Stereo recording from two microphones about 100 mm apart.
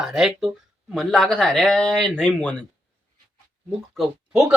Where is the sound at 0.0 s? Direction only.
5° right (ahead or behind).